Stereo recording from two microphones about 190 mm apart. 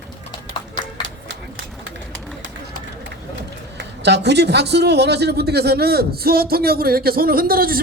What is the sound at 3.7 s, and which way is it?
Speech, 65° right (ahead or behind).